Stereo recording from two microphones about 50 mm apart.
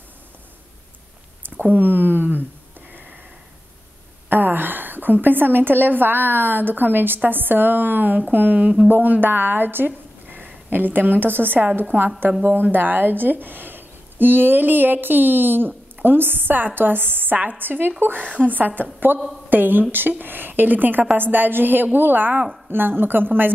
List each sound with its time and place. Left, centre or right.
1.6 s a sound: right
4.3 s a woman's voice: right
19.1 s speech: right